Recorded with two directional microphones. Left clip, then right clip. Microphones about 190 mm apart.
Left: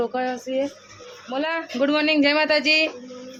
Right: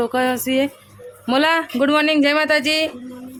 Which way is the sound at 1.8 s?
15° right (ahead or behind).